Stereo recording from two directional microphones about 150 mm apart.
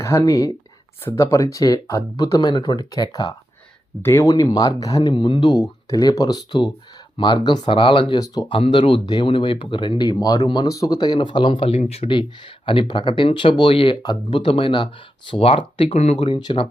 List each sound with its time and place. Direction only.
0.0 s speech: 20° left (ahead or behind)
4.0 s speech: 15° left (ahead or behind); by 16.1 s 40° left (ahead or behind)
16.2 s speech: 30° left (ahead or behind)